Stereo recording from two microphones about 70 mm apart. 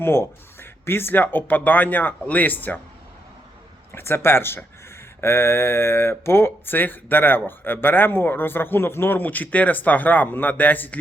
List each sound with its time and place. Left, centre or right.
0.0 s speech: left
3.9 s speech: left